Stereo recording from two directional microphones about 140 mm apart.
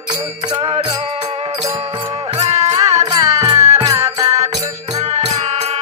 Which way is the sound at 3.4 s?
20° right (ahead or behind).